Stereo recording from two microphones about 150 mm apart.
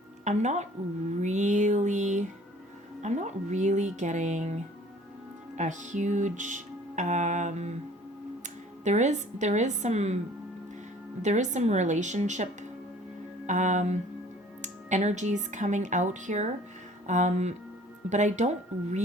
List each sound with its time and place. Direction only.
0.3 s speech: 50° right (ahead or behind)
1.2 s music: 55° right (ahead or behind)
3.0 s speech: 50° right (ahead or behind)
5.5 s music: 55° right (ahead or behind)
8.4 s a woman's voice: 50° right (ahead or behind)
11.2 s speech: 50° right (ahead or behind)
13.5 s speech: 55° right (ahead or behind)